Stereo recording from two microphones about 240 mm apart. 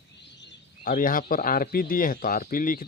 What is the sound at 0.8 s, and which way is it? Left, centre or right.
Speech, left.